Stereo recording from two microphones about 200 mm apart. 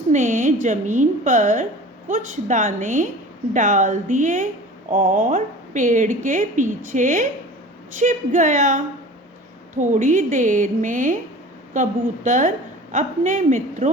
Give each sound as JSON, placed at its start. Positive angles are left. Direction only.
{"t": 0.1, "sound": "a woman's voice", "side_deg": -40}